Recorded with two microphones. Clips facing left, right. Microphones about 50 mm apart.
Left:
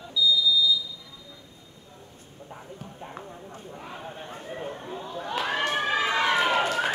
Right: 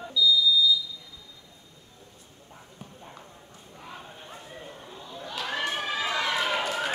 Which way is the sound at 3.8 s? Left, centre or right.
Centre.